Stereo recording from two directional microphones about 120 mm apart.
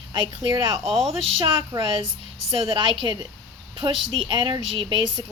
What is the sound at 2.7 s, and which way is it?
Speech, 40° right (ahead or behind).